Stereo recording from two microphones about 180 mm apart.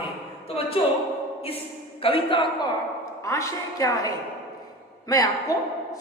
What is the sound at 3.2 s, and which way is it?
Speech, 15° left (ahead or behind).